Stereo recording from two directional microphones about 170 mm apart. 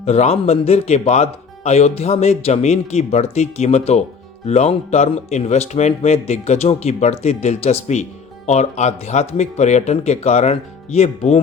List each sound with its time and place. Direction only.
0.0 s speech: 40° left (ahead or behind)